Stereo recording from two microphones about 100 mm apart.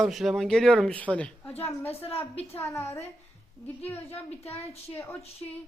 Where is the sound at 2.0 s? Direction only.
80° left.